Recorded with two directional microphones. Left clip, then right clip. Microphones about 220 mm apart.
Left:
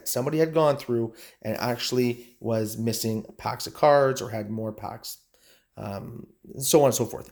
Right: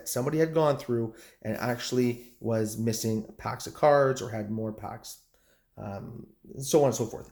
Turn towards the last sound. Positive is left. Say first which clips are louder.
# left 4 dB
turn(degrees=35)  # may be behind; listen again after turning